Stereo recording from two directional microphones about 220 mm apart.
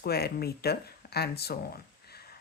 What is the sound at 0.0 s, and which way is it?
Speech, 45° left (ahead or behind).